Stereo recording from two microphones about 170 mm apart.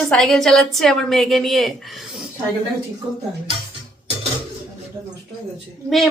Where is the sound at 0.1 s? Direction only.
5° left (ahead or behind).